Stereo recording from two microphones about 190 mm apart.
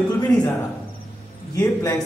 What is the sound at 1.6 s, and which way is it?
Speech, 10° left (ahead or behind).